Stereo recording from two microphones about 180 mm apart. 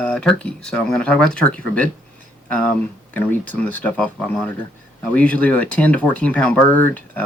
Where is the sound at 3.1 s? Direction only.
10° left (ahead or behind).